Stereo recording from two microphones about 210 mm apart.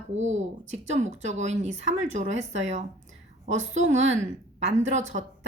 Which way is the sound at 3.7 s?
35° right (ahead or behind).